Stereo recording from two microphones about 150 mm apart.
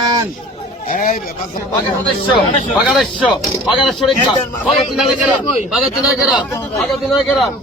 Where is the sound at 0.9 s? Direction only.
65° left (ahead or behind).